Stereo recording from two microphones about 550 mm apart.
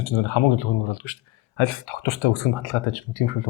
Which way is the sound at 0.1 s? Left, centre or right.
Left.